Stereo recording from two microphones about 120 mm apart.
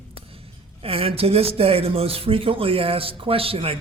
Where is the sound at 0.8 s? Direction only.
55° right (ahead or behind).